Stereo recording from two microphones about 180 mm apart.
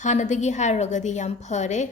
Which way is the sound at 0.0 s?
40° left (ahead or behind).